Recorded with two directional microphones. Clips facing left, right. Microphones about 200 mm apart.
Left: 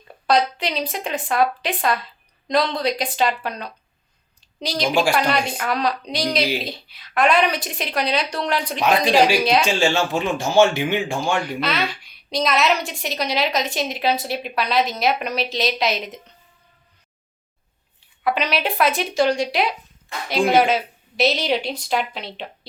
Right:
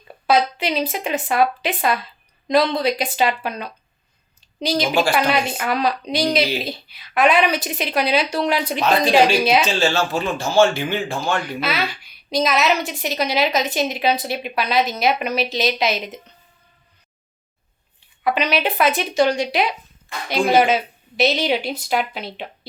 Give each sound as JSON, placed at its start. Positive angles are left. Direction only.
{"t": 0.3, "sound": "a woman's voice", "side_deg": -5}
{"t": 9.6, "sound": "speech", "side_deg": 15}
{"t": 11.3, "sound": "a woman's voice", "side_deg": 0}
{"t": 18.2, "sound": "a woman's voice", "side_deg": 0}